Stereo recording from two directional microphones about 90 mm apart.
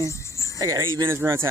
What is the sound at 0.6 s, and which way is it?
Speech, 35° right (ahead or behind).